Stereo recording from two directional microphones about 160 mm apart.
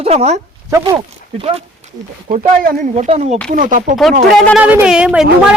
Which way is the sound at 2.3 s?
60° right (ahead or behind).